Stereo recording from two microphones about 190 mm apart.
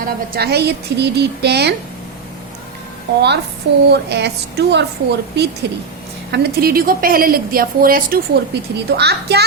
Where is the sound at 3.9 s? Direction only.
60° right (ahead or behind).